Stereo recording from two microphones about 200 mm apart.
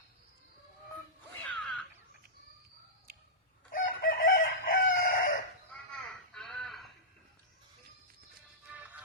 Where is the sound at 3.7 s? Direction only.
45° left (ahead or behind).